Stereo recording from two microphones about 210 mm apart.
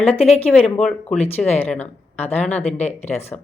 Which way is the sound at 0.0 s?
30° left (ahead or behind).